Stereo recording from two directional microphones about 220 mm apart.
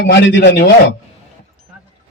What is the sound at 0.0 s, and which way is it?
Speech, 50° left (ahead or behind).